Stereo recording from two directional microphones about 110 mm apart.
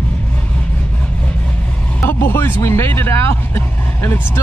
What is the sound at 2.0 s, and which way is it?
Vehicle, 20° left (ahead or behind).